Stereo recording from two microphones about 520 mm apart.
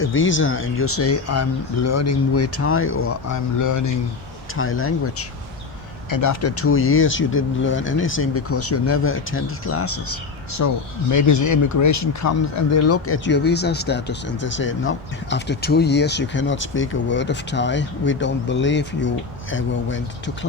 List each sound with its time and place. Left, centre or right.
0.0 s speech: left
4.5 s speech: left
6.1 s speech: left